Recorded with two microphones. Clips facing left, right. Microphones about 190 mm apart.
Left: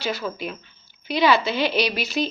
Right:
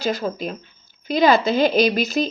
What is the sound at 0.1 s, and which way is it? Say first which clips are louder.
Speech: right 3 dB; 35° right (ahead or behind).